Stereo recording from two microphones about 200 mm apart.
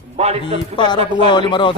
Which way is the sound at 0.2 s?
30° right (ahead or behind).